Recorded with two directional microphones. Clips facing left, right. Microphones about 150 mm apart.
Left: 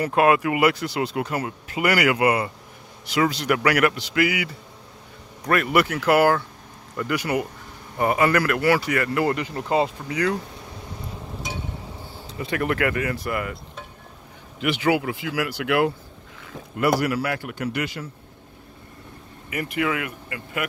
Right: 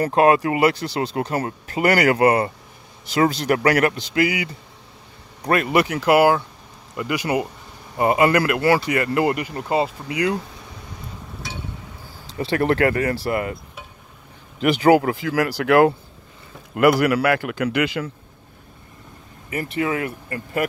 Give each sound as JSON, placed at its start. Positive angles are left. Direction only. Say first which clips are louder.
{"t": 0.0, "sound": "speech", "louder": "right 3 dB", "side_deg": -30}
{"t": 3.9, "sound": "speech", "louder": "right 2 dB", "side_deg": -20}
{"t": 9.3, "sound": "speech", "louder": "right 1 dB", "side_deg": -10}
{"t": 12.4, "sound": "speech", "louder": "right 5 dB", "side_deg": -35}
{"t": 14.6, "sound": "speech", "louder": "right 7 dB", "side_deg": -40}
{"t": 16.7, "sound": "speech", "louder": "right 5 dB", "side_deg": -70}
{"t": 19.5, "sound": "speech", "louder": "right 2 dB", "side_deg": -30}